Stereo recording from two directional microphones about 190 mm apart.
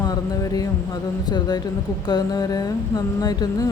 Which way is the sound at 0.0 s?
20° left (ahead or behind).